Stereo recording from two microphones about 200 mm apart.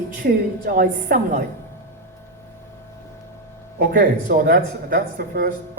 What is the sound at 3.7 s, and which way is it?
Speech, 40° right (ahead or behind).